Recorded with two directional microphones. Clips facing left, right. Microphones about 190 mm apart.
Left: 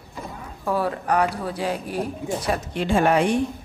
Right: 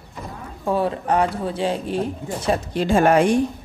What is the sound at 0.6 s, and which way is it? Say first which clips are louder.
Speech: right 2 dB; 25° right (ahead or behind).